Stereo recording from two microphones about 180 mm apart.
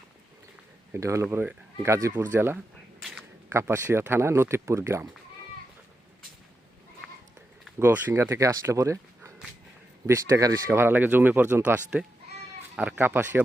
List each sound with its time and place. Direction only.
0.9 s speech: 15° right (ahead or behind)
7.0 s a sound: centre (ahead or behind)
7.8 s speech: 10° right (ahead or behind)